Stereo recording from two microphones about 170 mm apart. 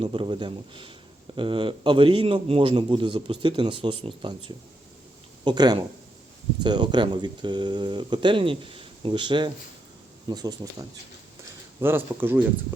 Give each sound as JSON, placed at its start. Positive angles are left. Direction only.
{"t": 0.0, "sound": "a man's voice", "side_deg": -30}